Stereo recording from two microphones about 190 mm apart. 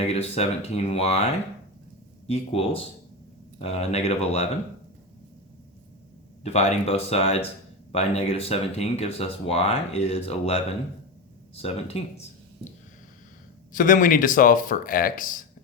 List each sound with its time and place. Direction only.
0.0 s speech: 35° left (ahead or behind)
6.4 s speech: 35° left (ahead or behind)
13.7 s speech: 45° left (ahead or behind)